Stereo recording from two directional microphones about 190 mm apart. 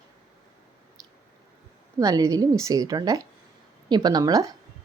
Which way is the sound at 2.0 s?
20° right (ahead or behind).